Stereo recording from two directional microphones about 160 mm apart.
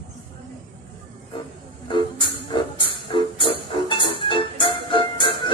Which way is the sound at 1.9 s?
30° left (ahead or behind).